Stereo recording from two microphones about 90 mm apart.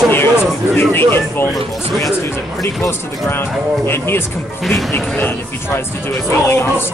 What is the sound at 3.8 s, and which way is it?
Speech, 25° left (ahead or behind).